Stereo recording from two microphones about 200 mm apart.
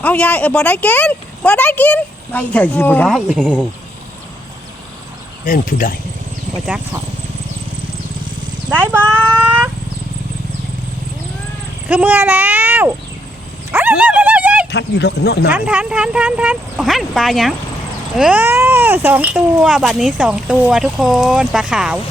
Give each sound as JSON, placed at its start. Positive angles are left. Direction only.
{"t": 0.0, "sound": "speech", "side_deg": 5}
{"t": 5.5, "sound": "speech", "side_deg": 45}
{"t": 8.7, "sound": "a child's voice", "side_deg": -10}
{"t": 11.9, "sound": "a child's voice", "side_deg": -10}
{"t": 13.7, "sound": "dog", "side_deg": -10}
{"t": 14.7, "sound": "speech", "side_deg": 55}
{"t": 15.4, "sound": "speech", "side_deg": -5}